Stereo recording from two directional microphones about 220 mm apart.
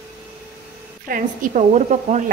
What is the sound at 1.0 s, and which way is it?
A woman's voice, 40° right (ahead or behind).